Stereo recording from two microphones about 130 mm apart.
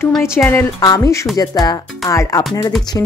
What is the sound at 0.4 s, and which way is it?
Speech, 10° left (ahead or behind).